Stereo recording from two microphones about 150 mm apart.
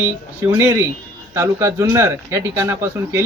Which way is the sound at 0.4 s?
15° right (ahead or behind).